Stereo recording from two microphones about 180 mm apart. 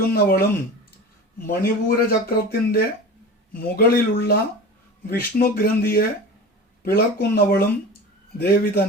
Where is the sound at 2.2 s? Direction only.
60° left (ahead or behind).